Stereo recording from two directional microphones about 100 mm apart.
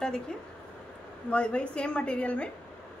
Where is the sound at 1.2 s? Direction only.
10° left (ahead or behind).